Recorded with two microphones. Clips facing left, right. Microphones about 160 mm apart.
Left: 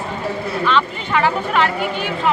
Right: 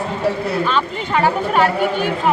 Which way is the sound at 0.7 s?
40° right (ahead or behind).